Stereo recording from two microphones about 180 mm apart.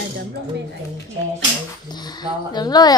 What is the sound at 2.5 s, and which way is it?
Speech, 20° left (ahead or behind).